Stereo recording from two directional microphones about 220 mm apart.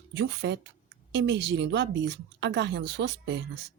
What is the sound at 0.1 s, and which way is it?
Speech, 50° right (ahead or behind).